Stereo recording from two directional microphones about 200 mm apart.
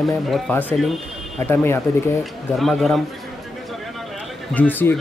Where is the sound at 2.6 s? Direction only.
Centre (ahead or behind).